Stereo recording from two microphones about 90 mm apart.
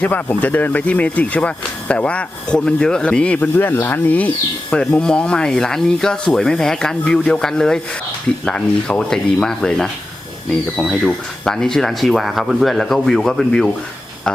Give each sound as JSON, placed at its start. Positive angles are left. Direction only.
{"t": 0.0, "sound": "speech", "side_deg": 20}
{"t": 4.7, "sound": "speech", "side_deg": 10}